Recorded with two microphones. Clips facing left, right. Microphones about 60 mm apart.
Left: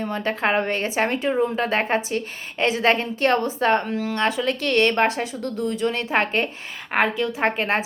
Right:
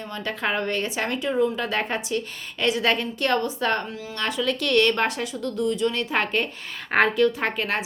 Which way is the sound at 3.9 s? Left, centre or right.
Left.